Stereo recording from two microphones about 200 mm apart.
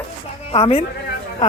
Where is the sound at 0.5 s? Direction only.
30° left (ahead or behind).